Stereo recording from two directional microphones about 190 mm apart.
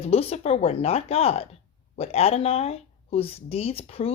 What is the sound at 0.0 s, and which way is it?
Speech, 30° left (ahead or behind).